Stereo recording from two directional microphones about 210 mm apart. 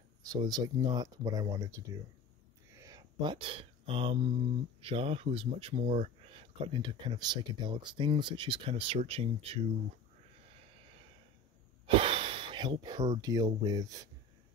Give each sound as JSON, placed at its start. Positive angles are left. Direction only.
{"t": 0.3, "sound": "speech", "side_deg": -20}
{"t": 2.7, "sound": "a sound", "side_deg": -15}
{"t": 4.8, "sound": "speech", "side_deg": -25}
{"t": 11.8, "sound": "speech", "side_deg": -25}